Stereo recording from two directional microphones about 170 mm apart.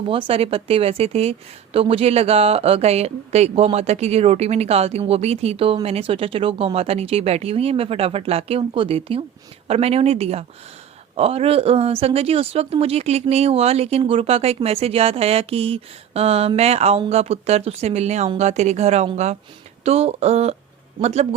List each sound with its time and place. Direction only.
0.1 s speech: 35° right (ahead or behind)